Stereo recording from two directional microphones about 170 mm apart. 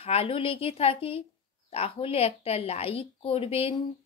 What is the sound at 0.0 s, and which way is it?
Speech, 35° left (ahead or behind).